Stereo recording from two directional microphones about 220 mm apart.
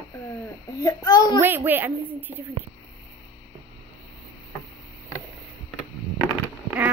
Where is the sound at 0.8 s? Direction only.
15° left (ahead or behind).